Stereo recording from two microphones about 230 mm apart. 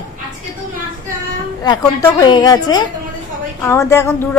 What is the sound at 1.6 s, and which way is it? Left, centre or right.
A woman's voice, centre.